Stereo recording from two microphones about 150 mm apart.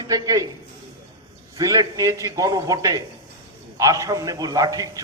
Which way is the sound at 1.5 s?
25° right (ahead or behind).